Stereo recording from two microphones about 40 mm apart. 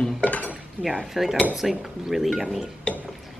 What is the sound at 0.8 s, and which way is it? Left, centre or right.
Speech, right.